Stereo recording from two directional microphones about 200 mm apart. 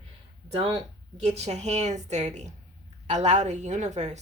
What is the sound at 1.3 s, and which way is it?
A woman's voice, 35° right (ahead or behind).